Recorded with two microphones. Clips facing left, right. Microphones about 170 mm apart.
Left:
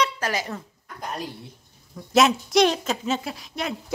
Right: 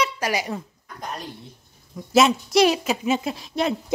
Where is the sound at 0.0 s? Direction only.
10° right (ahead or behind).